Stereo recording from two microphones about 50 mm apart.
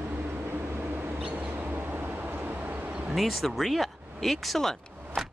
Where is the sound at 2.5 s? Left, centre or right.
Right.